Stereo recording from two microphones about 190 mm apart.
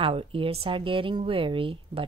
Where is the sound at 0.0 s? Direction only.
30° right (ahead or behind).